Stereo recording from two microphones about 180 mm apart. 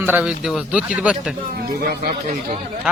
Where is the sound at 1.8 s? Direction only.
55° right (ahead or behind).